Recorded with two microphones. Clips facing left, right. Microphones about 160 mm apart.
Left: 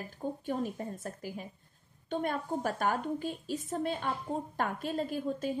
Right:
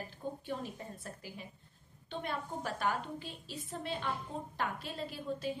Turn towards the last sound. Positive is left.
turn(degrees=45)  # may be behind; listen again after turning